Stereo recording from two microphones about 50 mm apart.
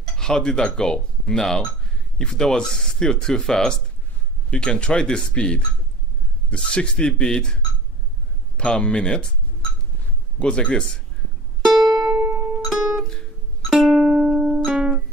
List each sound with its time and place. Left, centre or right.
0.2 s speech: centre
8.5 s speech: centre
10.4 s speech: left
11.6 s music: centre